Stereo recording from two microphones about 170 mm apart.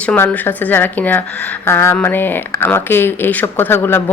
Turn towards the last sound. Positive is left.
turn(degrees=15)  # may be behind; listen again after turning